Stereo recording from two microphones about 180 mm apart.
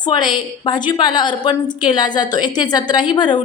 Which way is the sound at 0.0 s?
25° left (ahead or behind).